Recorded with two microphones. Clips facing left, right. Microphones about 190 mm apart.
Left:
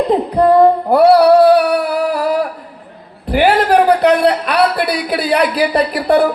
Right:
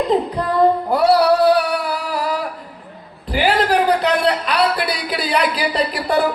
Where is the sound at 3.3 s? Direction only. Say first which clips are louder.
Left 5 dB; 55° left (ahead or behind).